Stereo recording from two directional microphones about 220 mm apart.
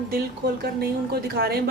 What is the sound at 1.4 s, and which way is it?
Speech, 45° right (ahead or behind).